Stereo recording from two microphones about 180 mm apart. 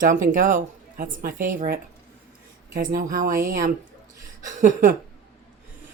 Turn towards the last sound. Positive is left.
turn(degrees=-45)  # may be behind; listen again after turning